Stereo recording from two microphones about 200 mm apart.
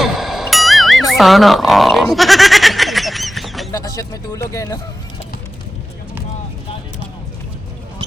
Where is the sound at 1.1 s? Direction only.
Centre (ahead or behind).